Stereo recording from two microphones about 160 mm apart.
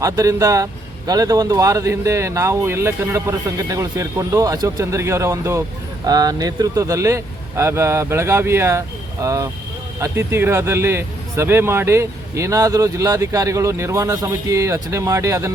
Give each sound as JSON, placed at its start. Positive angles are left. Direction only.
{"t": 0.0, "sound": "a man's voice", "side_deg": -20}